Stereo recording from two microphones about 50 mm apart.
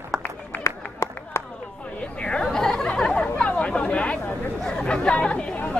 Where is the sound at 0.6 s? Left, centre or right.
Left.